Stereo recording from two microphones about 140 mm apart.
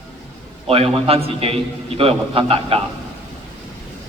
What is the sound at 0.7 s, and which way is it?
A man's voice, 45° right (ahead or behind).